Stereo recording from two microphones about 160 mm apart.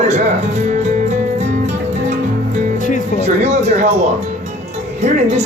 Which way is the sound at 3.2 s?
45° right (ahead or behind).